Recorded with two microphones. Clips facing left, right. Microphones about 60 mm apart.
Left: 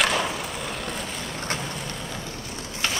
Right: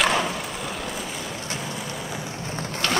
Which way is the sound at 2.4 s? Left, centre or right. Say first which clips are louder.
Right 5 dB; right.